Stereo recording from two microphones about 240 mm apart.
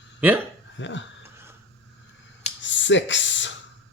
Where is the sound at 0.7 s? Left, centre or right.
Left.